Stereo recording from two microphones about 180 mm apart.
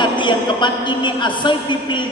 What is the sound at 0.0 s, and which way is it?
A woman's voice, 25° left (ahead or behind).